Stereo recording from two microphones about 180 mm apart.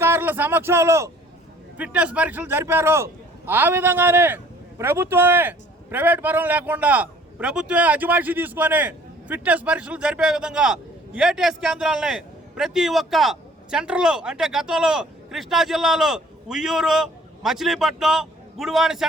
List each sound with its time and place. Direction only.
0.0 s a man's voice: 10° right (ahead or behind)